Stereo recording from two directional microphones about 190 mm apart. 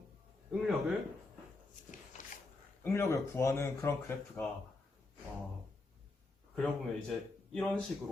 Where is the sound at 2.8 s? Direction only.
15° left (ahead or behind).